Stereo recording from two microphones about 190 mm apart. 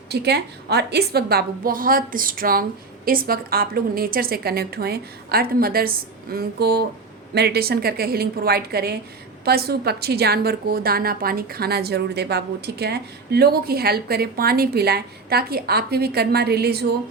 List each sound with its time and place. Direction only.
0.1 s a woman's voice: 60° right (ahead or behind)